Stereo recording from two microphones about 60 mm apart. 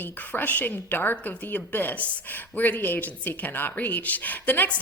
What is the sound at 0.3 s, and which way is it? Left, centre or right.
Speech, left.